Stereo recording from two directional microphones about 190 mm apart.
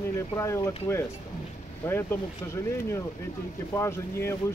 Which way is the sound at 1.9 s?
10° left (ahead or behind).